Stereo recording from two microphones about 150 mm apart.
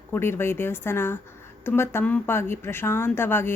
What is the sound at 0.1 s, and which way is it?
A woman's voice, 15° left (ahead or behind).